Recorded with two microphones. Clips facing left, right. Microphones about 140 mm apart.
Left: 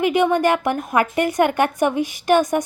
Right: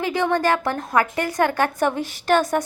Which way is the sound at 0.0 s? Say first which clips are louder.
Left 4 dB; 20° left (ahead or behind).